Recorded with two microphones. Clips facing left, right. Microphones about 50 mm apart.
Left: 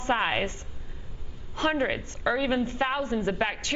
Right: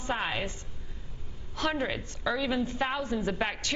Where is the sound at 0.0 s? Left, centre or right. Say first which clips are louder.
Left 6 dB; left.